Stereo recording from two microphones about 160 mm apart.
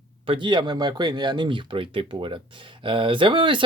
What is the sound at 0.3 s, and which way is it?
Speech, 30° right (ahead or behind).